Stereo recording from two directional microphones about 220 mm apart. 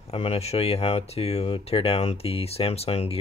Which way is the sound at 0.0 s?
25° left (ahead or behind).